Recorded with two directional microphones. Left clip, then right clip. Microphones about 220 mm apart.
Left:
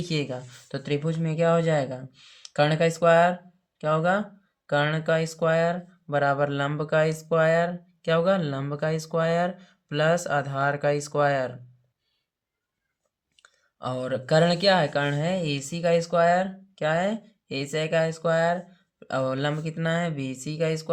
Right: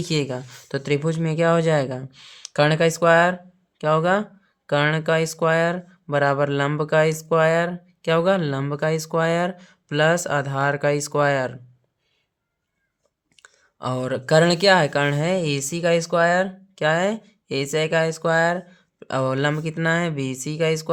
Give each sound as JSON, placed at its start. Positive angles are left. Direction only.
{"t": 0.0, "sound": "speech", "side_deg": -35}
{"t": 13.3, "sound": "speech", "side_deg": -30}